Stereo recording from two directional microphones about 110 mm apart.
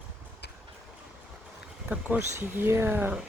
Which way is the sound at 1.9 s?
15° right (ahead or behind).